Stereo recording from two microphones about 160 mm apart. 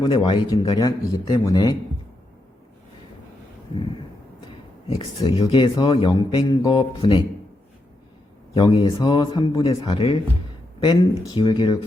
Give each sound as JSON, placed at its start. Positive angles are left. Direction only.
{"t": 0.0, "sound": "speech", "side_deg": 30}
{"t": 0.8, "sound": "speech", "side_deg": 25}
{"t": 4.9, "sound": "speech", "side_deg": 25}
{"t": 8.5, "sound": "speech", "side_deg": 30}